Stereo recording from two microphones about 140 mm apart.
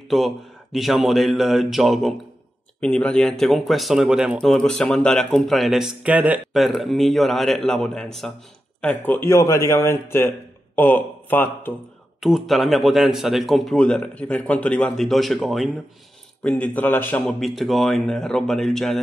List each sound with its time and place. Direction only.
0.1 s speech: centre (ahead or behind)
12.2 s speech: centre (ahead or behind)
17.4 s speech: centre (ahead or behind)